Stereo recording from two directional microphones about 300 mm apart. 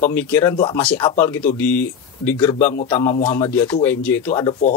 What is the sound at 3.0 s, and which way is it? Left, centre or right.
Speech, centre.